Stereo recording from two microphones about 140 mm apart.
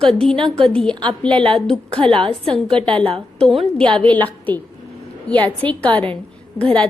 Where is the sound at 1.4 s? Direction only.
40° right (ahead or behind).